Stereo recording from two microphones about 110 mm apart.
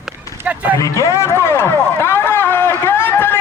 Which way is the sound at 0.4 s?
15° right (ahead or behind).